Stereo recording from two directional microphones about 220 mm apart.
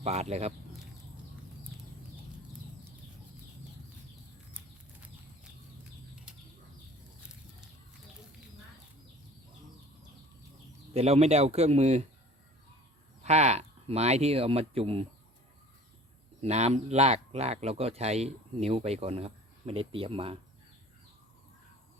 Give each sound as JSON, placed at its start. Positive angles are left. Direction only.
{"t": 0.0, "sound": "speech", "side_deg": -30}
{"t": 10.9, "sound": "speech", "side_deg": -30}
{"t": 13.2, "sound": "speech", "side_deg": -30}
{"t": 16.4, "sound": "speech", "side_deg": -30}